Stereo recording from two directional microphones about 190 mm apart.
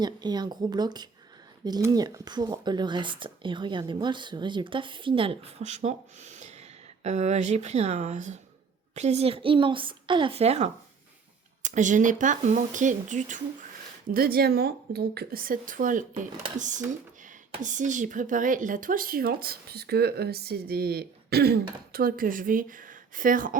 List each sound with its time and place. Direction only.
0.0 s speech: 20° right (ahead or behind); by 13.4 s 40° right (ahead or behind)
14.1 s speech: 50° right (ahead or behind)